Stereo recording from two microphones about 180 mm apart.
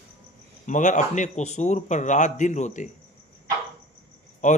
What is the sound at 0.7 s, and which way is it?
A man's voice, 45° left (ahead or behind).